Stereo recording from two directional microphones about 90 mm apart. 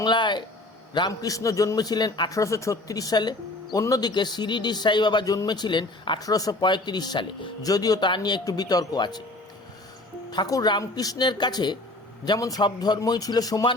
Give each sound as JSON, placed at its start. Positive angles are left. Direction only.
{"t": 0.0, "sound": "speech", "side_deg": 60}
{"t": 0.9, "sound": "speech", "side_deg": 45}
{"t": 2.3, "sound": "speech", "side_deg": 35}
{"t": 3.8, "sound": "speech", "side_deg": 40}
{"t": 6.1, "sound": "speech", "side_deg": 45}
{"t": 7.6, "sound": "speech", "side_deg": 45}
{"t": 8.4, "sound": "speech", "side_deg": 45}
{"t": 10.3, "sound": "speech", "side_deg": 50}
{"t": 12.4, "sound": "speech", "side_deg": 40}
{"t": 12.6, "sound": "speech", "side_deg": 50}